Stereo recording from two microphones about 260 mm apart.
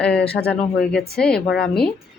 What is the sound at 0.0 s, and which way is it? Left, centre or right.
Speech, centre.